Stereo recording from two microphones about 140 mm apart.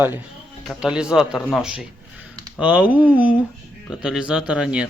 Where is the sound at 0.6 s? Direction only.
5° right (ahead or behind).